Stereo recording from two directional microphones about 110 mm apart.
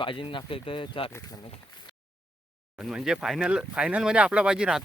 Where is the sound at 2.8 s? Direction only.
5° right (ahead or behind).